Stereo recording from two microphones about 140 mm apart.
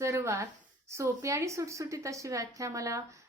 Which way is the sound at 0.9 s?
20° right (ahead or behind).